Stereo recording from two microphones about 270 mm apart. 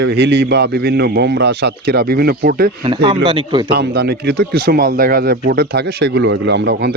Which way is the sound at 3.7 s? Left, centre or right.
Right.